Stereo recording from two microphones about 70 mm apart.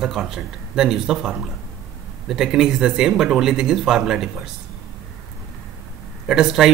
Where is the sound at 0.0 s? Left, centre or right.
Centre.